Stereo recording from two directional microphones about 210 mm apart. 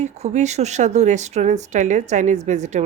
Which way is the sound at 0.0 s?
30° right (ahead or behind).